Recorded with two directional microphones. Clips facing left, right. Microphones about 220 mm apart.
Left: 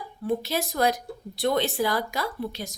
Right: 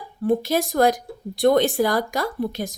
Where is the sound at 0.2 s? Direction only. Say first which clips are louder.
Right 6 dB; 50° right (ahead or behind).